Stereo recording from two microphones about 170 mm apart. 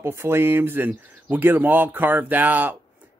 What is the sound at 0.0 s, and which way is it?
Speech, 15° right (ahead or behind).